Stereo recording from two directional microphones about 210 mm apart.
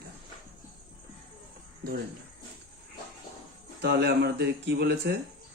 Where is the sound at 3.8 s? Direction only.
50° right (ahead or behind).